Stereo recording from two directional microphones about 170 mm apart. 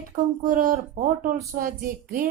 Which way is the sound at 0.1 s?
40° right (ahead or behind).